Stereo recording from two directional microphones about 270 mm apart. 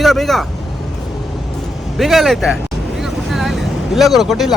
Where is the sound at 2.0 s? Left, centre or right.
Centre.